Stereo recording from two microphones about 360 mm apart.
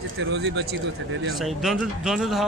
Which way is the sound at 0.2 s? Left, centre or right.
Right.